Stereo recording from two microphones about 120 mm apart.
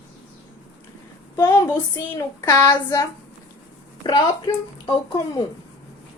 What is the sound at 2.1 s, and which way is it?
Speech, 25° left (ahead or behind).